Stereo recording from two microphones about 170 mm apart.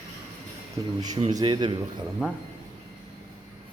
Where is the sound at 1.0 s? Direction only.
25° right (ahead or behind).